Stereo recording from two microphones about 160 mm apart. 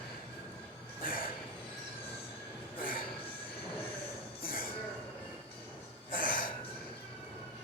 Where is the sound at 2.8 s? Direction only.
65° left (ahead or behind).